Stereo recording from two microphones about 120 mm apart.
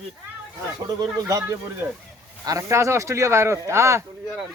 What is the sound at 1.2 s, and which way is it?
Speech, 25° right (ahead or behind).